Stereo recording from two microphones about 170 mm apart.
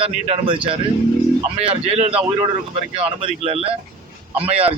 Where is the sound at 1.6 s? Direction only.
35° right (ahead or behind).